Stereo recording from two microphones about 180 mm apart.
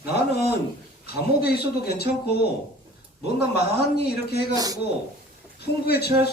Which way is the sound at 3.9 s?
65° left (ahead or behind).